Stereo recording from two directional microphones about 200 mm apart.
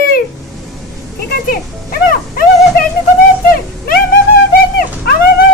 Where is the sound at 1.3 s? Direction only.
50° left (ahead or behind).